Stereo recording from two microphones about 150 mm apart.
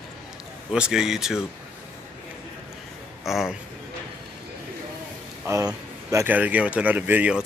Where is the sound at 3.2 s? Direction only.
Centre (ahead or behind).